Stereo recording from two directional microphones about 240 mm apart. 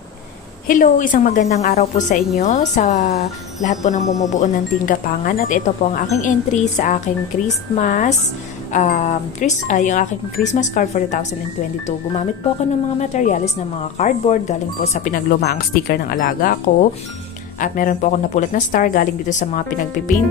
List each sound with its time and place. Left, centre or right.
0.7 s speech: left
13.0 s speech: left